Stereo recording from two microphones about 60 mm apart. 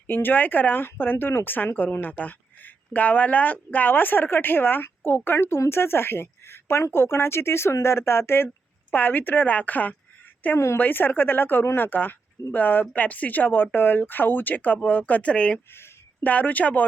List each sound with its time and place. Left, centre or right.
0.1 s speech: left
8.9 s speech: left